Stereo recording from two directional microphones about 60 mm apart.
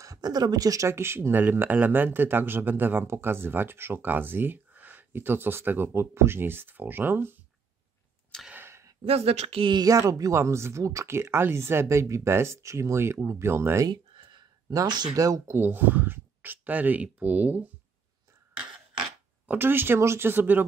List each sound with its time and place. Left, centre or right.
0.0 s speech: right
0.8 s speech: right
1.4 s speech: right
8.5 s a sound: right
9.8 s speech: right
11.1 s speech: right
14.7 s speech: right
15.5 s speech: right
19.4 s speech: right